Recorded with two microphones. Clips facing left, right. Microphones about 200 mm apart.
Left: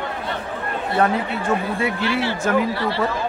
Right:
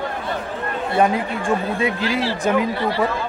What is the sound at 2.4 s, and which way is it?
Speech, 15° right (ahead or behind).